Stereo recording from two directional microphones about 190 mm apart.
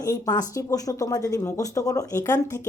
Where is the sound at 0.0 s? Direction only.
20° left (ahead or behind).